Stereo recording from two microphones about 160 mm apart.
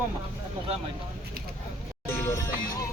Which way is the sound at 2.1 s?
15° left (ahead or behind).